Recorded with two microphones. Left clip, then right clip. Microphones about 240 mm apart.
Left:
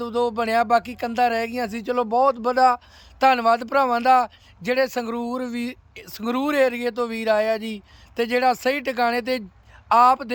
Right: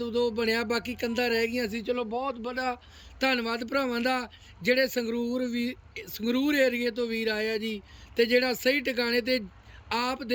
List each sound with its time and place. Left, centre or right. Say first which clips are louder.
0.0 s speech: left 4 dB; centre